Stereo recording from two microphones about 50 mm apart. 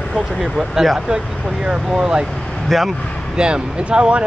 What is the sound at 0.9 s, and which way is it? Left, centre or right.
Speech, centre.